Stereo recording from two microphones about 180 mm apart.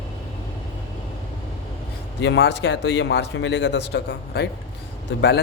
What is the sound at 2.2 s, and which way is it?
Speech, 90° left.